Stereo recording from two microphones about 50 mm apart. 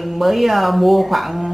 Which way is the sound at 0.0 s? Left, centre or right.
Centre.